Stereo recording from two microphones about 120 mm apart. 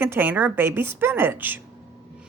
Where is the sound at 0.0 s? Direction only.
15° right (ahead or behind).